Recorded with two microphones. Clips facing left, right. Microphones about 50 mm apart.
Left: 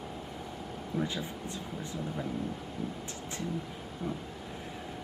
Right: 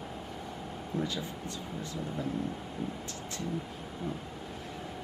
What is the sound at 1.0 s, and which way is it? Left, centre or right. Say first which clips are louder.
Speech: left 1 dB; left.